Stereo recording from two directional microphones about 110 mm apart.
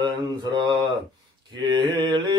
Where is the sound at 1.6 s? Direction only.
45° right (ahead or behind).